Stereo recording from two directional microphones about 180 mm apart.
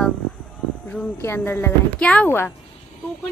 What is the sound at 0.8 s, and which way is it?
Speech, 10° left (ahead or behind).